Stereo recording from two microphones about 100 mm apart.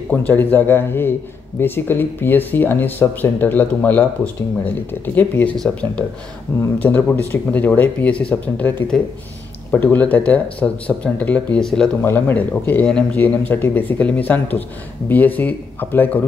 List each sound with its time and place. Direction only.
0.1 s speech: 20° left (ahead or behind)
12.0 s speech: 20° left (ahead or behind)